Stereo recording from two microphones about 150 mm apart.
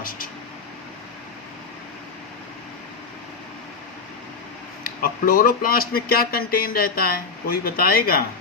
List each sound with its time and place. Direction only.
4.8 s speech: 70° left (ahead or behind)